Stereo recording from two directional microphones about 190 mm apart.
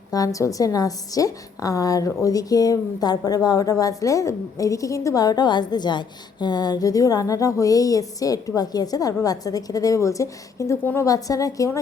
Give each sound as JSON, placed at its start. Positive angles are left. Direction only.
{"t": 0.1, "sound": "a woman's voice", "side_deg": 15}